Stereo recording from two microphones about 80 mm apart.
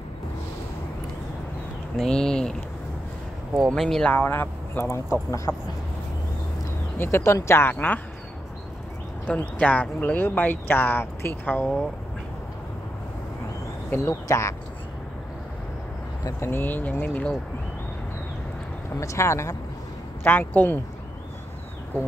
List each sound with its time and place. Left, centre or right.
2.0 s speech: centre
3.7 s speech: centre
4.1 s speech: left
7.0 s speech: left
9.2 s speech: centre
14.2 s speech: left
16.3 s speech: left
18.9 s speech: left
20.2 s speech: left